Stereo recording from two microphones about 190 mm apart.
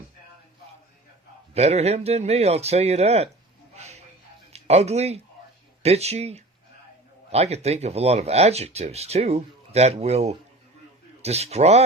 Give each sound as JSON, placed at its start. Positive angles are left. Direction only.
{"t": 1.5, "sound": "speech", "side_deg": -35}
{"t": 3.8, "sound": "music", "side_deg": -35}
{"t": 4.5, "sound": "speech", "side_deg": -35}